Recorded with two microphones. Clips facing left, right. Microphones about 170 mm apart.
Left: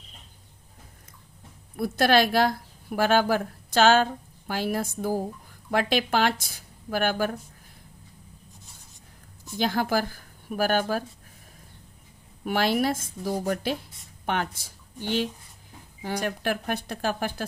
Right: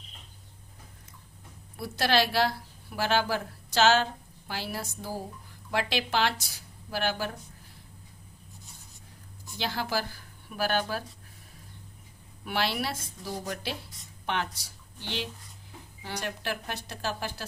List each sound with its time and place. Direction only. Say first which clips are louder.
1.7 s speech: left 5 dB; 50° left (ahead or behind)
9.6 s speech: left 6 dB; 50° left (ahead or behind)
12.5 s speech: left 7 dB; 45° left (ahead or behind)